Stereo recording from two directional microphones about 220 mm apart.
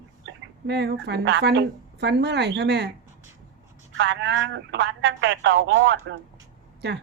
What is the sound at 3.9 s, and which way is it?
Speech, 55° right (ahead or behind).